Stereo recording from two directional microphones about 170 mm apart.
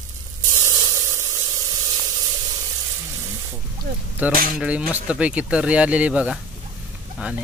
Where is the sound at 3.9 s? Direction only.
60° right (ahead or behind).